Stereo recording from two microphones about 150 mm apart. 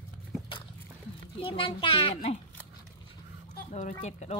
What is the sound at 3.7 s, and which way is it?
Speech, 50° left (ahead or behind).